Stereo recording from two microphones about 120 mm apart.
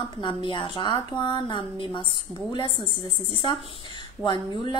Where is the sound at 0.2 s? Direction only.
40° left (ahead or behind).